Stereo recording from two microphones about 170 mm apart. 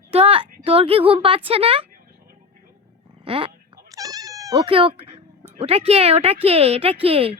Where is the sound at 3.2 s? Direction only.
35° right (ahead or behind).